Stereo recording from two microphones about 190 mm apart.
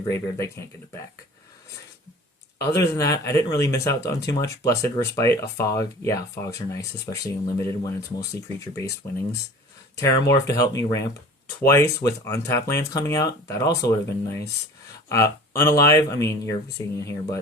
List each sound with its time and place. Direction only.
0.1 s speech: 15° left (ahead or behind)
2.6 s speech: 15° left (ahead or behind)